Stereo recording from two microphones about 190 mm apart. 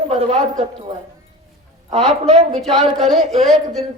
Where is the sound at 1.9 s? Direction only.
35° right (ahead or behind).